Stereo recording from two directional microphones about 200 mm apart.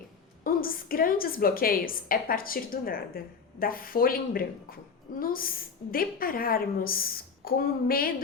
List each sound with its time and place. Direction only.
0.4 s a woman's voice: 45° left (ahead or behind)